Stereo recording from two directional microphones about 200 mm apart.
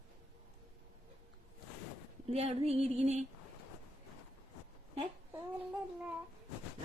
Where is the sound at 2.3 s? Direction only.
30° right (ahead or behind).